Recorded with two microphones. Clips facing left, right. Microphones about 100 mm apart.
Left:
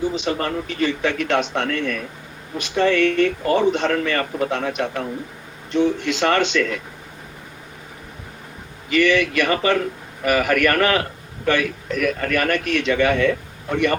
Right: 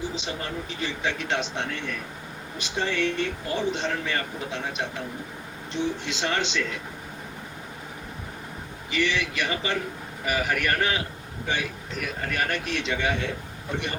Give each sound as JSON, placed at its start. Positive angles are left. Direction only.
{"t": 0.2, "sound": "a man's voice", "side_deg": 65}
{"t": 8.9, "sound": "a man's voice", "side_deg": 55}